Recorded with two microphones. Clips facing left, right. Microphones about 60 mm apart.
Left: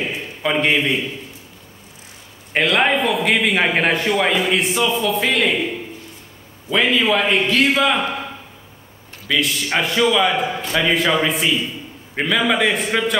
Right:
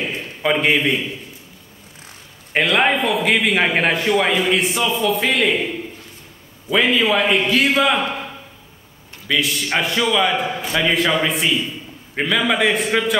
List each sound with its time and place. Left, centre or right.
0.4 s a man's voice: centre
2.5 s a man's voice: centre
6.7 s a man's voice: centre
9.3 s a man's voice: centre